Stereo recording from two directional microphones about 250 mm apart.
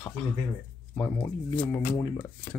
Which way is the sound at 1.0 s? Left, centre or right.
Centre.